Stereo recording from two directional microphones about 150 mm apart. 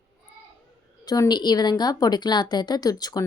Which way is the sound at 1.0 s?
25° left (ahead or behind).